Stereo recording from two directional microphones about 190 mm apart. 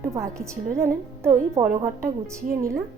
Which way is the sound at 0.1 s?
15° right (ahead or behind).